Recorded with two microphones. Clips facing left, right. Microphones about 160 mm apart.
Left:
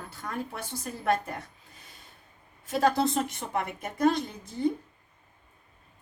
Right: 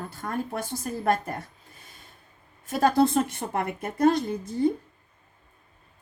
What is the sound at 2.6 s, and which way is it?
Speech, 50° right (ahead or behind).